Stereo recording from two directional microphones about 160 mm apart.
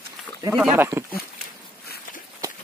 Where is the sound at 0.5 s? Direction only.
10° right (ahead or behind).